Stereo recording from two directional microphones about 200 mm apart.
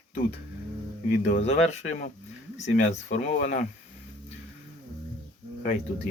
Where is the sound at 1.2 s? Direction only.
35° left (ahead or behind).